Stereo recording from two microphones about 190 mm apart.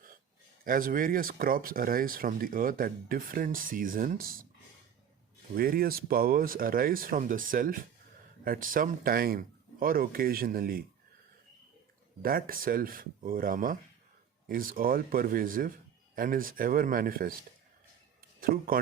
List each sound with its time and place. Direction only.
0.6 s speech: 45° right (ahead or behind)
5.5 s speech: 50° right (ahead or behind)
12.2 s speech: 50° right (ahead or behind)
18.3 s speech: 50° right (ahead or behind)